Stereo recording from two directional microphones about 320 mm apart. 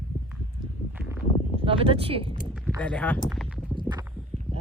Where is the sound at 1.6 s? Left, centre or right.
Centre.